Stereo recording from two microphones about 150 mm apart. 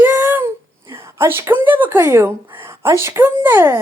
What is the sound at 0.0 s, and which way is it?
A woman's voice, 15° right (ahead or behind).